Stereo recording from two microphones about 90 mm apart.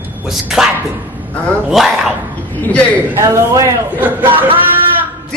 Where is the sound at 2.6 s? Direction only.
15° left (ahead or behind).